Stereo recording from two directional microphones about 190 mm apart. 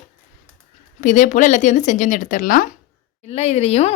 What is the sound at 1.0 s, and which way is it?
Speech, 40° left (ahead or behind).